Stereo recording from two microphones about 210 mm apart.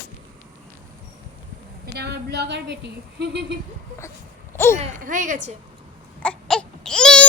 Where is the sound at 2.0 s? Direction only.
50° right (ahead or behind).